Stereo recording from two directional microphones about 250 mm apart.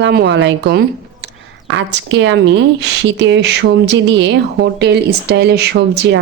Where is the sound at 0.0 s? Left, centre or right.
Right.